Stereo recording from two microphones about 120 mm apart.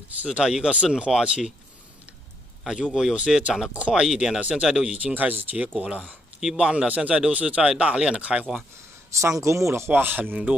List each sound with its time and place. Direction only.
0.2 s speech: 5° right (ahead or behind)
2.6 s speech: 5° right (ahead or behind)
9.1 s speech: 25° right (ahead or behind)